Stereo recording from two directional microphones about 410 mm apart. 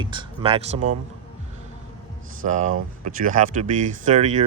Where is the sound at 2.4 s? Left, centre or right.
Centre.